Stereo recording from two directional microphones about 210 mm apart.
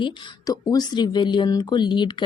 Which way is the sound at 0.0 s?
20° left (ahead or behind).